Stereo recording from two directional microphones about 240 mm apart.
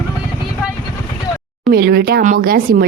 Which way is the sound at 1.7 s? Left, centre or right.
Right.